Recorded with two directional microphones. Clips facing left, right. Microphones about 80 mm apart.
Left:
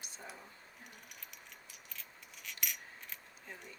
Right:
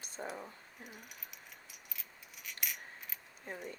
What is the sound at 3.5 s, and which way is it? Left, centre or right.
Speech, right.